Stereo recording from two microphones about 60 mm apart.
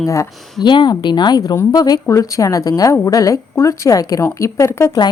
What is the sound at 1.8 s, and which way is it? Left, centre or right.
Speech, left.